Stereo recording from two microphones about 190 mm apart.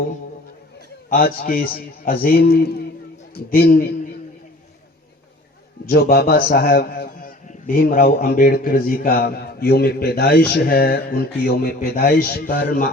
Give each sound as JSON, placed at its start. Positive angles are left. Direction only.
{"t": 1.1, "sound": "a man's voice", "side_deg": 50}
{"t": 5.8, "sound": "a man's voice", "side_deg": 50}